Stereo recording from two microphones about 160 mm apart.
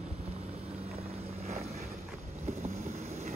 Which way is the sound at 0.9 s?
40° right (ahead or behind).